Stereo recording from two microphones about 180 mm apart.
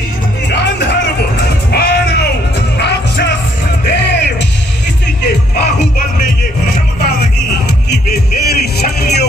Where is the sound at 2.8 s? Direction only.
70° left (ahead or behind).